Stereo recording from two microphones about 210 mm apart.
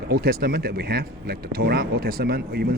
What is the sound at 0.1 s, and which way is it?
Speech, 45° right (ahead or behind).